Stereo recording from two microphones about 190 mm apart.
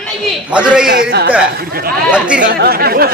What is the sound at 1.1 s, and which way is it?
Speech, 60° right (ahead or behind).